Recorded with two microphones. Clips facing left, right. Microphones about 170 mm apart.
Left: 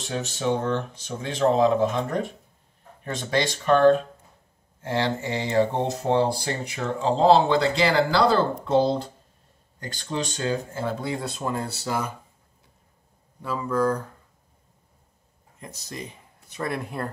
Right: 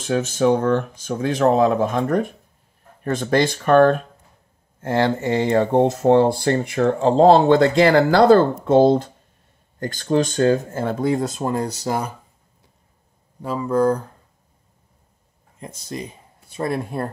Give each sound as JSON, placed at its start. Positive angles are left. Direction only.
{"t": 0.1, "sound": "speech", "side_deg": -50}
{"t": 13.4, "sound": "speech", "side_deg": -30}
{"t": 15.6, "sound": "speech", "side_deg": -25}